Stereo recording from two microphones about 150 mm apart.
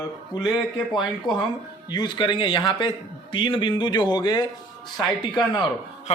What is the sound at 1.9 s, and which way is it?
A man's voice, 30° left (ahead or behind).